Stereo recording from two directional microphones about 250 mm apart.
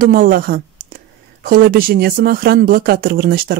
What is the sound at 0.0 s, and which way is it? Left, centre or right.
Speech, right.